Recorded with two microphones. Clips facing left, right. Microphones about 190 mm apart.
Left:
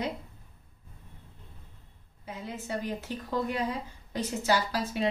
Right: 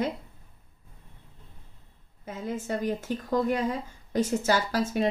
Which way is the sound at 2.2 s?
45° right (ahead or behind).